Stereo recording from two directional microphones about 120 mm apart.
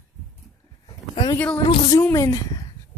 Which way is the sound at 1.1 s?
40° left (ahead or behind).